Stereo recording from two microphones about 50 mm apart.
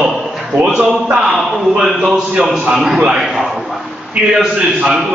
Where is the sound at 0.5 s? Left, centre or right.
Right.